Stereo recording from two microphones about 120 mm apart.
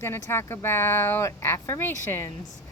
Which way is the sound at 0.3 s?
20° left (ahead or behind).